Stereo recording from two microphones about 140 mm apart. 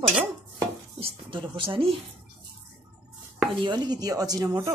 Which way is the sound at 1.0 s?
40° right (ahead or behind).